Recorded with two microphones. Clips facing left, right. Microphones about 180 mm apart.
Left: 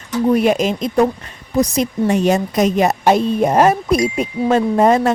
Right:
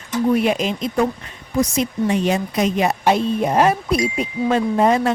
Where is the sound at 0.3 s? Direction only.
45° left (ahead or behind).